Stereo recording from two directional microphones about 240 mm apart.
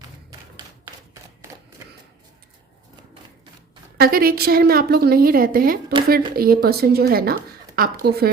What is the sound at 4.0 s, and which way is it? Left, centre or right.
A woman's voice, right.